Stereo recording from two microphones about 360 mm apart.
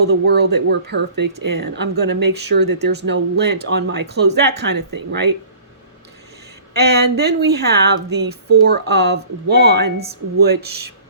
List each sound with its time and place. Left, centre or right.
0.1 s speech: right
6.7 s speech: right
10.7 s speech: right